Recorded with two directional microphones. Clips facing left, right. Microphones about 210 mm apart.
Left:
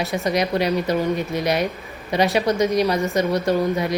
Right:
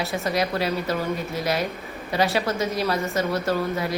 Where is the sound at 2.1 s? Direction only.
20° left (ahead or behind).